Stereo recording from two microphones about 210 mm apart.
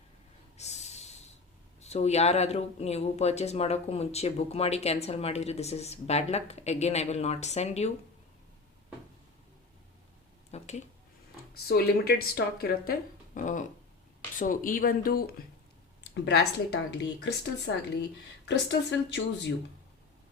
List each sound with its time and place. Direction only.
0.5 s snort: 30° left (ahead or behind)
1.8 s speech: 30° left (ahead or behind)
10.5 s a sound: 35° left (ahead or behind)
11.7 s speech: 45° left (ahead or behind)
16.1 s speech: 55° left (ahead or behind)